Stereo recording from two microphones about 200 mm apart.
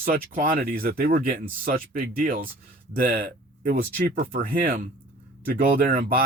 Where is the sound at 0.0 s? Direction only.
45° right (ahead or behind).